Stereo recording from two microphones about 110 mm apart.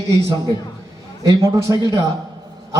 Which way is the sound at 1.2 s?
35° right (ahead or behind).